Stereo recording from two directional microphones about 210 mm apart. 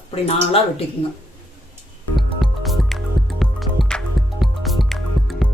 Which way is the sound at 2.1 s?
Centre (ahead or behind).